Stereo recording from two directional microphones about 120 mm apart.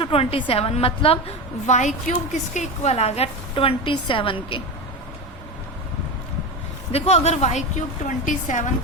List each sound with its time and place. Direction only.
0.0 s a woman's voice: 50° left (ahead or behind)
1.6 s a woman's voice: 80° left; by 3.2 s 60° left (ahead or behind)
3.5 s a woman's voice: 50° left (ahead or behind)
6.9 s a woman's voice: 60° left (ahead or behind); by 8.7 s 90° left